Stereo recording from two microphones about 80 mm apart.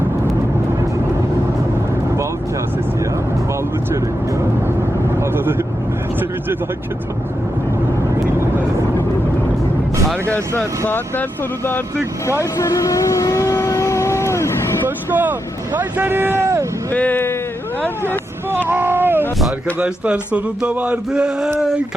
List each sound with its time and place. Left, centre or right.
5.2 s vehicle: right
10.8 s speech: left
12.5 s vehicle: left
14.8 s speech: right
16.9 s speech: centre
18.7 s boat: right
19.8 s speech: centre